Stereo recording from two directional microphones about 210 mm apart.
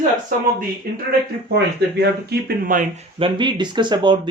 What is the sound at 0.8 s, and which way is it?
Speech, 45° right (ahead or behind).